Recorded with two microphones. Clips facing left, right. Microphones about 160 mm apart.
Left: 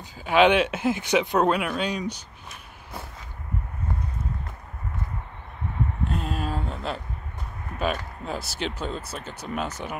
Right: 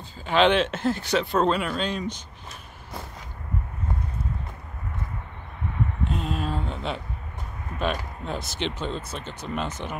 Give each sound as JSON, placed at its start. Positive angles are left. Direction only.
{"t": 0.2, "sound": "speech", "side_deg": 10}
{"t": 6.0, "sound": "a sound", "side_deg": 0}
{"t": 7.8, "sound": "speech", "side_deg": 5}